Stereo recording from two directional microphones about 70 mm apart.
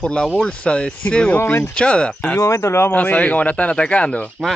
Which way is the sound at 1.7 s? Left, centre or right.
Centre.